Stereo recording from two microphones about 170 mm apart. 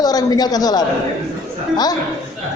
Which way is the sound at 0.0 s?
20° left (ahead or behind).